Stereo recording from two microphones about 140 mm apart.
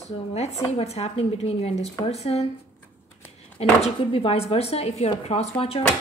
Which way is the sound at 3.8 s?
45° left (ahead or behind).